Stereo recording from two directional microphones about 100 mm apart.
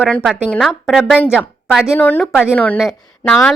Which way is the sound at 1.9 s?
20° left (ahead or behind).